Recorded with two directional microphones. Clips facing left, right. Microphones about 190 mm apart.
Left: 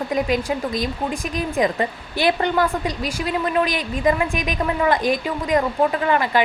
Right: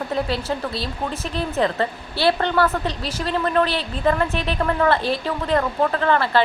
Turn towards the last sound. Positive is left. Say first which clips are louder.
# even
turn(degrees=15)  # may be behind; listen again after turning